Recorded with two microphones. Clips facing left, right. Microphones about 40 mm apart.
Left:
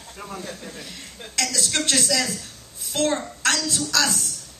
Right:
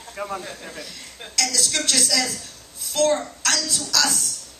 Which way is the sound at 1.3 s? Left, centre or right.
Left.